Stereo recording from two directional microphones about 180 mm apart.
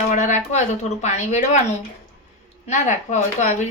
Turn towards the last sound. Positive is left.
turn(degrees=40)  # may be behind; listen again after turning